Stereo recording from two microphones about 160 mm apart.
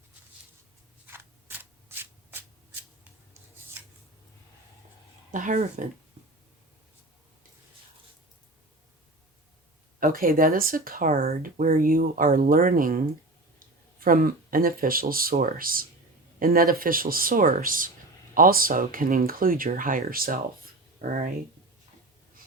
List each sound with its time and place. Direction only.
1.0 s shuffling cards: 15° right (ahead or behind)
5.3 s speech: 55° right (ahead or behind)
10.0 s speech: 60° right (ahead or behind)